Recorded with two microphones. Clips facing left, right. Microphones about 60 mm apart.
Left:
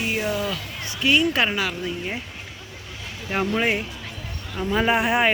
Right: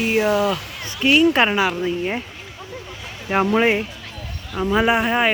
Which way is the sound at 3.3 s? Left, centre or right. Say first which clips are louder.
Right 6 dB; right.